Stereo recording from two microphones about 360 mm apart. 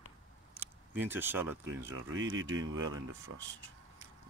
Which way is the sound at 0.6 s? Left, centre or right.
Centre.